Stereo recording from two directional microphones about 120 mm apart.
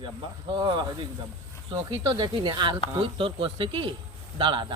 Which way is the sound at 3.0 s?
45° right (ahead or behind).